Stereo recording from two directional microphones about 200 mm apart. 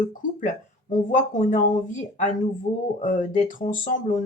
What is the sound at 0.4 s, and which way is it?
Speech, 40° left (ahead or behind).